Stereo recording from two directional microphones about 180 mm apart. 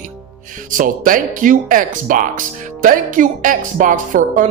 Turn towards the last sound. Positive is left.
turn(degrees=-45)  # may be behind; listen again after turning